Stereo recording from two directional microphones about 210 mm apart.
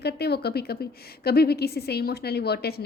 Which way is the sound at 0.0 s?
50° left (ahead or behind).